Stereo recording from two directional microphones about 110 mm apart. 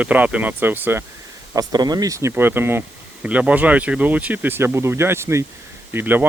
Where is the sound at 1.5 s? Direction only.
35° right (ahead or behind).